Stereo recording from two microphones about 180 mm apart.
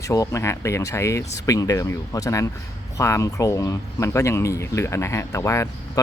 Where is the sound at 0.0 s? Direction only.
20° left (ahead or behind).